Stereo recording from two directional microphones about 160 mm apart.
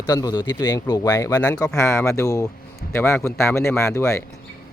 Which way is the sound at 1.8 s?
15° left (ahead or behind).